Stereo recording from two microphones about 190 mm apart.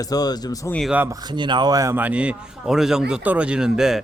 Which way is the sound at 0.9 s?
15° right (ahead or behind).